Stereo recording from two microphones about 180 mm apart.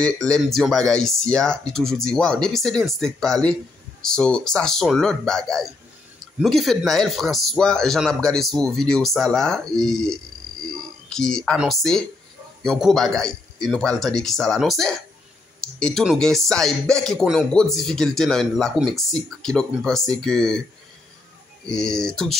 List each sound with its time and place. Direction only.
0.0 s speech: 5° left (ahead or behind)
21.6 s speech: 5° left (ahead or behind)